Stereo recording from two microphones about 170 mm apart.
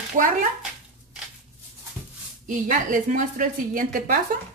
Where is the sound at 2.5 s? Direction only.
50° right (ahead or behind).